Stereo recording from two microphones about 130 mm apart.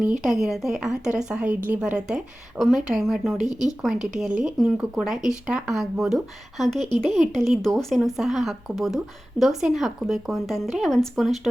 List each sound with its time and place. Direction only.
0.0 s a woman's voice: 5° right (ahead or behind)
3.5 s speech: 30° left (ahead or behind)
3.8 s a woman's voice: 5° right (ahead or behind)